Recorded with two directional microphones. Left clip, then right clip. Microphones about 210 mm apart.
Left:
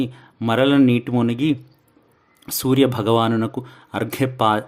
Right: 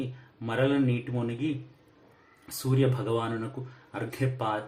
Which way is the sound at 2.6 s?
50° left (ahead or behind).